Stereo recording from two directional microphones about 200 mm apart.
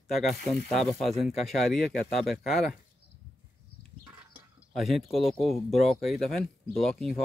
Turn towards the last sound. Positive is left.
turn(degrees=0)  # may be behind; listen again after turning